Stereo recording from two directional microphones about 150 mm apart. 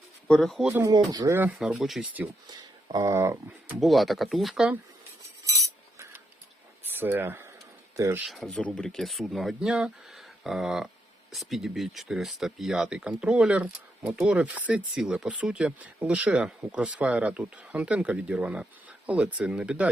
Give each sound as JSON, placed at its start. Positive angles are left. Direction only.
{"t": 0.3, "sound": "speech", "side_deg": 0}
{"t": 0.7, "sound": "speech", "side_deg": -15}
{"t": 1.5, "sound": "speech", "side_deg": -5}
{"t": 2.5, "sound": "speech", "side_deg": -25}
{"t": 3.8, "sound": "speech", "side_deg": 0}
{"t": 6.8, "sound": "speech", "side_deg": -15}
{"t": 8.3, "sound": "speech", "side_deg": 5}